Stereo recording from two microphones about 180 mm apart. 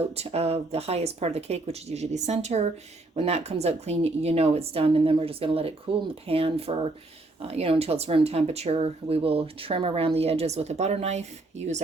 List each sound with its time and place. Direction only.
0.1 s speech: 35° right (ahead or behind)